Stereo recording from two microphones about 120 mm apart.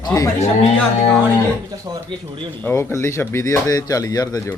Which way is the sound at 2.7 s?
20° left (ahead or behind).